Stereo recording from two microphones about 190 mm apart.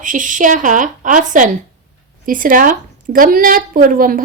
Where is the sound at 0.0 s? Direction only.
45° right (ahead or behind).